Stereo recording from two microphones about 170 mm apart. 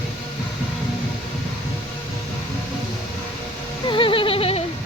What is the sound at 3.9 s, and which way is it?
Music, 30° left (ahead or behind).